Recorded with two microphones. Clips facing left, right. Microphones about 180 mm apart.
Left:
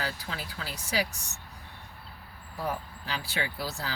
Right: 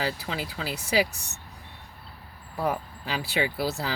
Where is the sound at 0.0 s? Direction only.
90° right.